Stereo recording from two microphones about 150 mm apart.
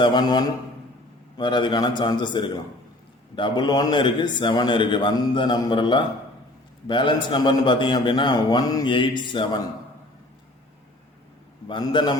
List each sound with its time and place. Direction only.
0.0 s a man's voice: 30° left (ahead or behind)
11.7 s a man's voice: 30° left (ahead or behind)